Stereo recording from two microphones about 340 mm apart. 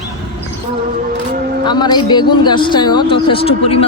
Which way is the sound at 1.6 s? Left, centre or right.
Centre.